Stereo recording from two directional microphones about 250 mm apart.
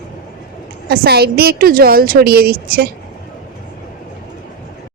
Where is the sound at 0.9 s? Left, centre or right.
Right.